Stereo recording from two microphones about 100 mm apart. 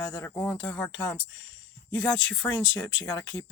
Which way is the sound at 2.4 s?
20° left (ahead or behind).